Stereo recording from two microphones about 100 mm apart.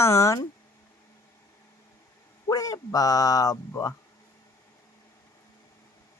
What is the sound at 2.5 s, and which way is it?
Speech, 40° left (ahead or behind).